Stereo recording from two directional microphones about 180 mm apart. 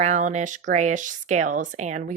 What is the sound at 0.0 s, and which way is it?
Speech, 40° right (ahead or behind).